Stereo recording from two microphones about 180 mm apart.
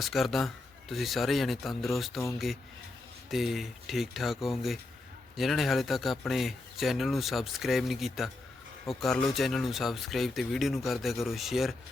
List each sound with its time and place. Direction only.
0.0 s speech: centre (ahead or behind)
3.2 s speech: centre (ahead or behind)